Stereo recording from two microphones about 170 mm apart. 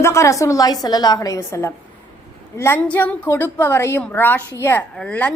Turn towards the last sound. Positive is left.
turn(degrees=5)  # may be behind; listen again after turning